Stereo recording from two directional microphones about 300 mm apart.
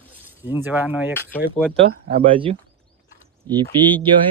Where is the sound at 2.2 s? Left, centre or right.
Centre.